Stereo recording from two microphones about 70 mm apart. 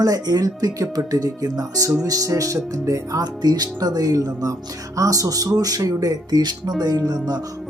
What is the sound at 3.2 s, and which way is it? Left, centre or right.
Speech, right.